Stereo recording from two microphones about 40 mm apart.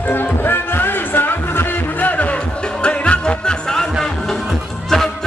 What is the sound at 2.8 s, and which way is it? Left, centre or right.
Music, left.